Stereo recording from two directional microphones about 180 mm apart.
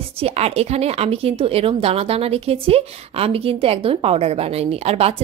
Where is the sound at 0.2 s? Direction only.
35° right (ahead or behind).